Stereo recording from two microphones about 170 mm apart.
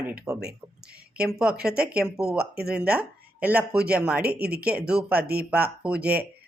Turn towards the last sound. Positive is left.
turn(degrees=-5)  # may be behind; listen again after turning